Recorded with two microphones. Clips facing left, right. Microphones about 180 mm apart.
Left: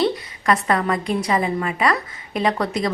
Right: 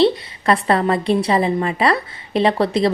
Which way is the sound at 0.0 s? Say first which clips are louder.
Right 5 dB; 30° right (ahead or behind).